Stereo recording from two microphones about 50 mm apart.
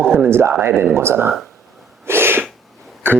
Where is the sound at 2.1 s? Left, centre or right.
Right.